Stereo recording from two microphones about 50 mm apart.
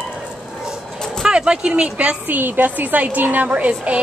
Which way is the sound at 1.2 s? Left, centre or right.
Centre.